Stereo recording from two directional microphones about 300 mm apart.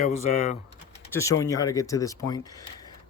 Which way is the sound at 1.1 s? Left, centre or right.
Centre.